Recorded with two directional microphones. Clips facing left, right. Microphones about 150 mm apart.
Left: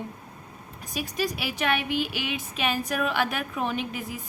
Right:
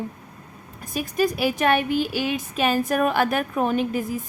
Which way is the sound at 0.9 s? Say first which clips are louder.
Right 6 dB; 50° right (ahead or behind).